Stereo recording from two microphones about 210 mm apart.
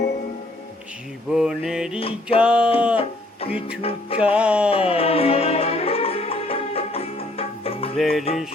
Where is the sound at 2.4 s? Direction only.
5° right (ahead or behind).